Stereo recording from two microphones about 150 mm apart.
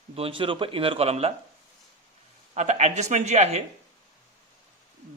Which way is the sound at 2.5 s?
50° right (ahead or behind).